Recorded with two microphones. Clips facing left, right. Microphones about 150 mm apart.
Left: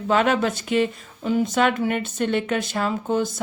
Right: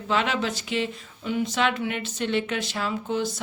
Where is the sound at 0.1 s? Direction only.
50° left (ahead or behind).